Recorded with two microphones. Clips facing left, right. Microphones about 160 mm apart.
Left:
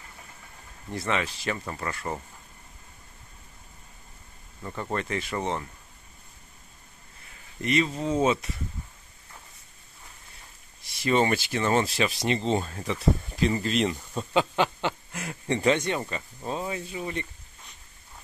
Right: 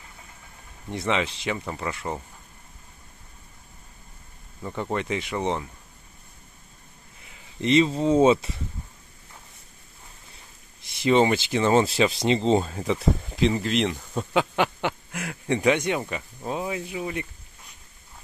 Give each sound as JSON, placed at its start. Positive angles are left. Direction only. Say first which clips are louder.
{"t": 0.8, "sound": "speech", "louder": "right 3 dB", "side_deg": -20}
{"t": 4.6, "sound": "speech", "louder": "right 3 dB", "side_deg": -15}
{"t": 7.2, "sound": "speech", "louder": "right 5 dB", "side_deg": -25}
{"t": 11.0, "sound": "speech", "louder": "right 4 dB", "side_deg": -20}
{"t": 13.6, "sound": "speech", "louder": "right 1 dB", "side_deg": -75}
{"t": 14.1, "sound": "speech", "louder": "right 1 dB", "side_deg": -15}